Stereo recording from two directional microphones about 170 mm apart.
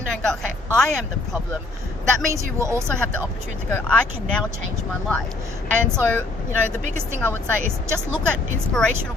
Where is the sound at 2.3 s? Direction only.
20° right (ahead or behind).